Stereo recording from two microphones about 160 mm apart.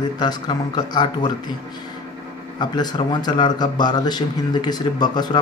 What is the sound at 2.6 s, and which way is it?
A man's voice, 30° left (ahead or behind).